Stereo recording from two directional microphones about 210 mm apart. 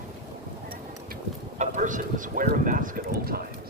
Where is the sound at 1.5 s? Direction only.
35° right (ahead or behind).